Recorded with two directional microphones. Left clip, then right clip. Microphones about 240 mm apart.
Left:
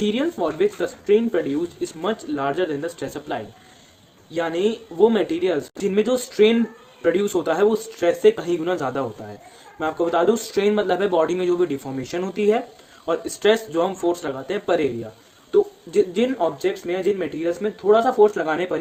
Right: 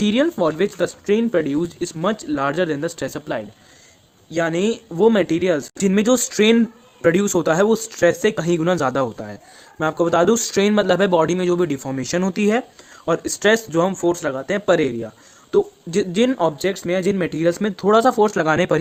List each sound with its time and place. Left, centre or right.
0.0 s speech: right